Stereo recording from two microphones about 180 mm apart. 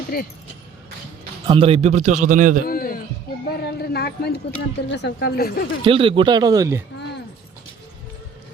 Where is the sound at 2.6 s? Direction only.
50° left (ahead or behind).